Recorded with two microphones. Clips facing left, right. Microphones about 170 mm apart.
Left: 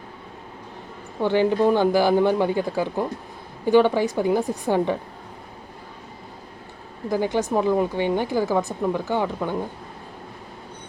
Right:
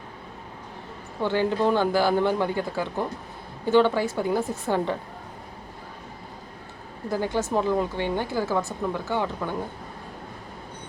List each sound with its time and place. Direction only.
1.2 s speech: 15° left (ahead or behind)
7.1 s speech: 15° left (ahead or behind)